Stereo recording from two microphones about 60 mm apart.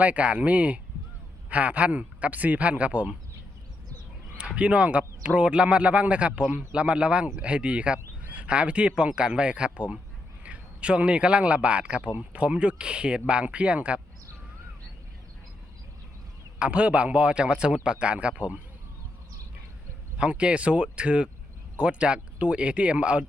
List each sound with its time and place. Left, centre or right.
0.0 s a man's voice: right
4.4 s a man's voice: right
16.6 s a man's voice: right
20.1 s a man's voice: centre